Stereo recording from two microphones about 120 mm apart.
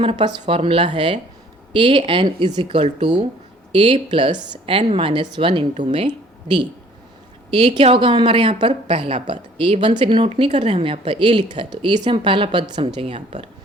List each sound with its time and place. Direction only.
0.0 s speech: 45° right (ahead or behind)
4.8 s speech: 55° right (ahead or behind); by 6.7 s 40° right (ahead or behind)
7.8 s speech: 45° right (ahead or behind); by 9.8 s 60° right (ahead or behind)
9.8 s speech: 45° right (ahead or behind)
10.5 s speech: 65° right (ahead or behind); by 13.2 s 50° right (ahead or behind)